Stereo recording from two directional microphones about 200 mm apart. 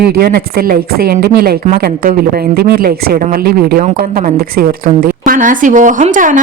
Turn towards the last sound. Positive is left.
turn(degrees=-40)  # may be behind; listen again after turning